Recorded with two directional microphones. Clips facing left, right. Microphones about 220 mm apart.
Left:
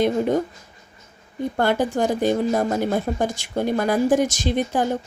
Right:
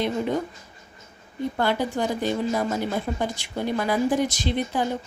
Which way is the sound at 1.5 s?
50° left (ahead or behind).